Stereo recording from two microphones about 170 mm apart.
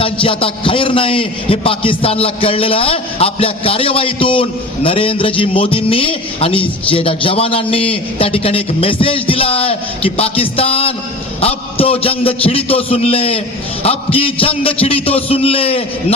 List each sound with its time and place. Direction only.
0.0 s a man's voice: 30° left (ahead or behind)